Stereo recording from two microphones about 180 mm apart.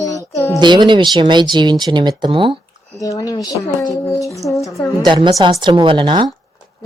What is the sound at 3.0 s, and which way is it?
Speech, 20° left (ahead or behind).